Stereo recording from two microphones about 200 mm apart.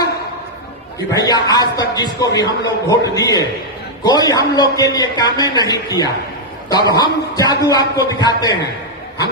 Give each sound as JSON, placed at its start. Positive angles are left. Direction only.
{"t": 1.1, "sound": "a man's voice", "side_deg": 20}